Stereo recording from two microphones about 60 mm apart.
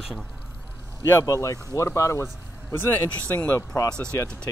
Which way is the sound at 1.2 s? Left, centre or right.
Left.